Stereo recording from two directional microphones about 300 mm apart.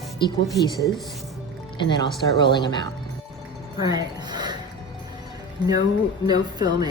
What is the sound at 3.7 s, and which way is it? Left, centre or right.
Music, centre.